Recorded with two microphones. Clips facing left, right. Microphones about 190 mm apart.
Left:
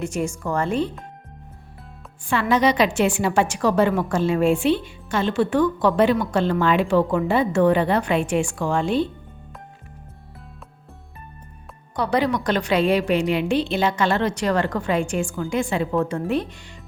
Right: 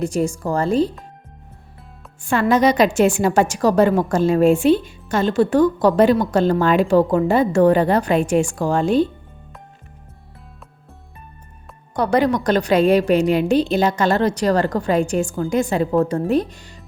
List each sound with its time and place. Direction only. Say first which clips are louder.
0.0 s a woman's voice: right 5 dB; 35° right (ahead or behind)
2.2 s a woman's voice: right 4 dB; 45° right (ahead or behind)
11.9 s a woman's voice: right 4 dB; 45° right (ahead or behind)